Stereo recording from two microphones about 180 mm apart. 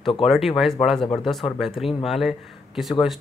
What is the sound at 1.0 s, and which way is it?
Speech, 30° left (ahead or behind).